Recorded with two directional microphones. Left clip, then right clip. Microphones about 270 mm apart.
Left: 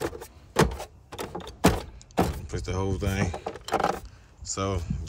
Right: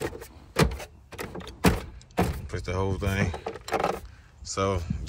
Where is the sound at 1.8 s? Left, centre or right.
Centre.